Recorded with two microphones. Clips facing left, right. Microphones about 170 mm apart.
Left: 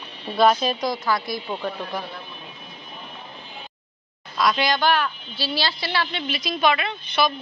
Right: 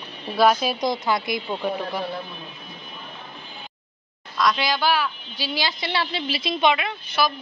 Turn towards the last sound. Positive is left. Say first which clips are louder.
# left 1 dB
turn(degrees=-5)  # may be behind; listen again after turning